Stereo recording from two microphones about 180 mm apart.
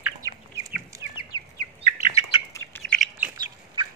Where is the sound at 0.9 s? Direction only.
15° right (ahead or behind).